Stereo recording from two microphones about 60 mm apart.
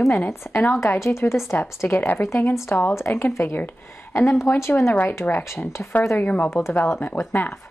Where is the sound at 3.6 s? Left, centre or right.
Left.